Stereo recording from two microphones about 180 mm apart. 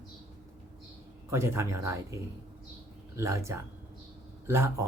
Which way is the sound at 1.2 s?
15° right (ahead or behind).